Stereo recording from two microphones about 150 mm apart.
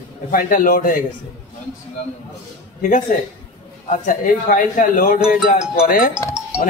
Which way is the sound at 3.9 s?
60° left (ahead or behind).